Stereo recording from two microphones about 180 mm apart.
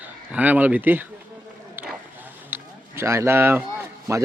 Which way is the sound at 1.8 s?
10° right (ahead or behind).